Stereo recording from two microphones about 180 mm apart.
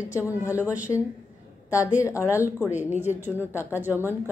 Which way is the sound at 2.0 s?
15° left (ahead or behind).